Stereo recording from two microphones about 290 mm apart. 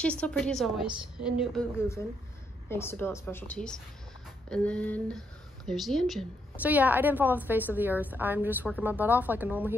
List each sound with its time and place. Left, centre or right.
0.0 s a woman's voice: centre